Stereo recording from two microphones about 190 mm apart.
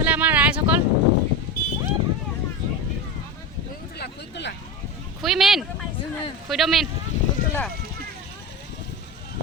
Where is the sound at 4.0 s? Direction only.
60° left (ahead or behind).